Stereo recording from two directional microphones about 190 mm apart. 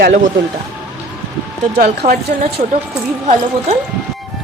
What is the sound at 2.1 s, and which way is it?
Speech, 55° right (ahead or behind).